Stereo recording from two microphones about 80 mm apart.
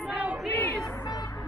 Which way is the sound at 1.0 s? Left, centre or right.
Left.